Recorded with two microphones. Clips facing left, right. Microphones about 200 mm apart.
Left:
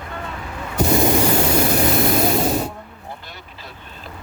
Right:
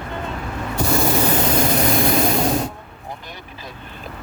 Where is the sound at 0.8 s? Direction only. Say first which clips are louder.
Left 3 dB; 20° left (ahead or behind).